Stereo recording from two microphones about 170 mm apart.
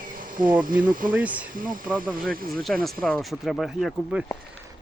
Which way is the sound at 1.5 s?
55° right (ahead or behind).